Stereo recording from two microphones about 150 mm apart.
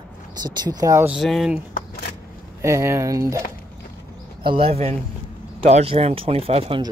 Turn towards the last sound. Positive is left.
turn(degrees=-40)  # may be behind; listen again after turning